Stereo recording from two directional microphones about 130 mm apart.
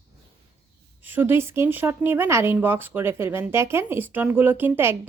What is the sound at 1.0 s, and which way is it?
Speech, 15° right (ahead or behind).